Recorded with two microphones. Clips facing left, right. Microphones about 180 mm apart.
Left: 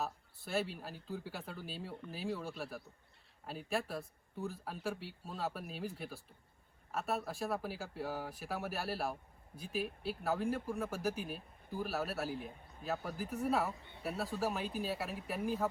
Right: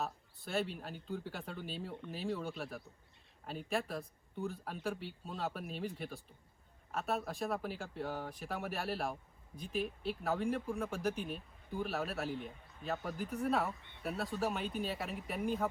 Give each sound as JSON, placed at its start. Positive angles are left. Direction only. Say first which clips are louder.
{"t": 0.0, "sound": "speech", "louder": "even", "side_deg": 0}